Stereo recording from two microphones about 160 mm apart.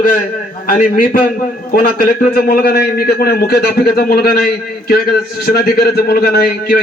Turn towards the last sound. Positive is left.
turn(degrees=70)  # may be behind; listen again after turning